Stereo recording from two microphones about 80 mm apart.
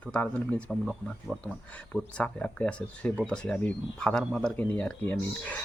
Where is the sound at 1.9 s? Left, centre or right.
Centre.